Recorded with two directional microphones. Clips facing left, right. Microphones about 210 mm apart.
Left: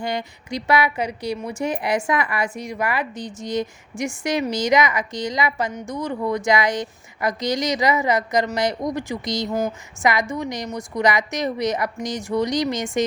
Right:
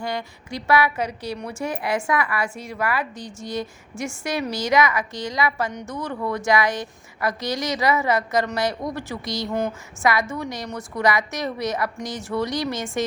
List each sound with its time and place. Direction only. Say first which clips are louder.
0.0 s speech: left 2 dB; 20° left (ahead or behind)
9.5 s speech: even; 5° left (ahead or behind)
10.0 s speech: left 1 dB; 15° left (ahead or behind)